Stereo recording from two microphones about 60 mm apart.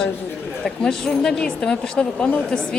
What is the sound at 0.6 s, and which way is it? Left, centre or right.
A woman's voice, centre.